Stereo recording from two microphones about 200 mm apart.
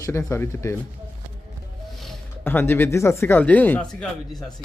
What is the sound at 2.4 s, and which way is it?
A man's voice, 10° left (ahead or behind).